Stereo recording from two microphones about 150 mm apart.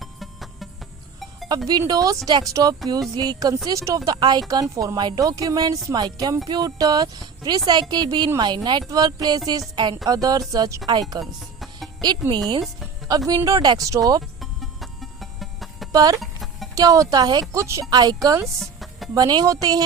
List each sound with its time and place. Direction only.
0.0 s music: centre (ahead or behind)
1.5 s speech: 25° right (ahead or behind)
11.2 s music: centre (ahead or behind)
13.1 s speech: 25° right (ahead or behind)
14.4 s music: centre (ahead or behind)
15.9 s speech: 25° right (ahead or behind)
16.2 s music: centre (ahead or behind)
16.7 s speech: 25° right (ahead or behind)
18.6 s music: centre (ahead or behind)
19.1 s speech: 25° right (ahead or behind)